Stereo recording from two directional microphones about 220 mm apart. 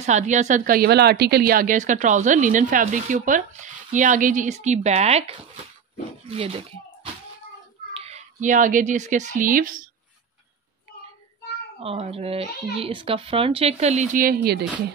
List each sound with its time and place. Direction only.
0.0 s a woman's voice: 30° right (ahead or behind)
6.3 s speech: 25° right (ahead or behind)
7.9 s speech: 30° right (ahead or behind)
11.8 s speech: 25° right (ahead or behind); by 14.6 s 45° right (ahead or behind)